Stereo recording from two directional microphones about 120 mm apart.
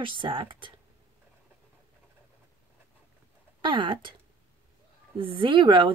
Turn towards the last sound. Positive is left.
turn(degrees=-40)  # may be behind; listen again after turning